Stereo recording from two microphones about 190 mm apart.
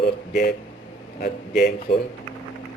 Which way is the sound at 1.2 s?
55° left (ahead or behind).